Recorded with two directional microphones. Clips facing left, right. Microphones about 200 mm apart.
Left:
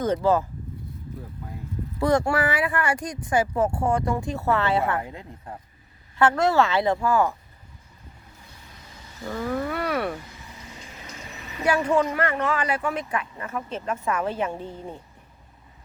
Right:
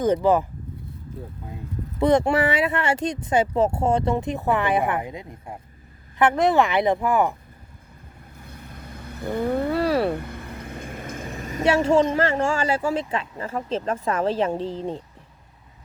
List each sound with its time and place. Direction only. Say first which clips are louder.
0.0 s a woman's voice: right 3 dB; 15° right (ahead or behind)
8.4 s vehicle: right 8 dB; 55° right (ahead or behind)
9.5 s speech: right 5 dB; 30° right (ahead or behind)
10.1 s vehicle: right 6 dB; 60° right (ahead or behind)
11.6 s speech: right 3 dB; 25° right (ahead or behind)
14.6 s speech: right 7 dB; 90° right